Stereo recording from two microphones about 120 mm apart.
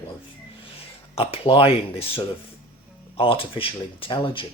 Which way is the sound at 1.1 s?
50° left (ahead or behind).